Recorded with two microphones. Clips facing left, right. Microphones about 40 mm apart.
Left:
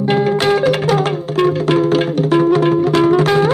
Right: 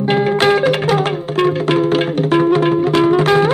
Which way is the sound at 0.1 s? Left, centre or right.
Right.